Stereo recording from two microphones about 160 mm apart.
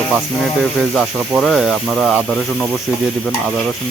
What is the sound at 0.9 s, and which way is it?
Speech, centre (ahead or behind).